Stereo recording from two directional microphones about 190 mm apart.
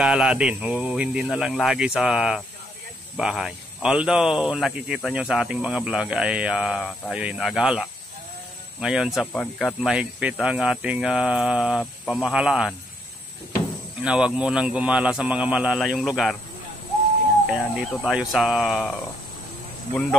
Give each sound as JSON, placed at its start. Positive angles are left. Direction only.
{"t": 0.0, "sound": "speech", "side_deg": -5}
{"t": 14.0, "sound": "speech", "side_deg": -5}
{"t": 17.5, "sound": "speech", "side_deg": -5}
{"t": 19.9, "sound": "speech", "side_deg": 5}